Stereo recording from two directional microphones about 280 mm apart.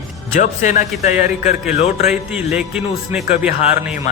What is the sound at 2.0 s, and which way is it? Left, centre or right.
A man's voice, centre.